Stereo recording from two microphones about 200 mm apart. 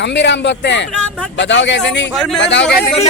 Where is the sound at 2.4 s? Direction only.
60° left (ahead or behind).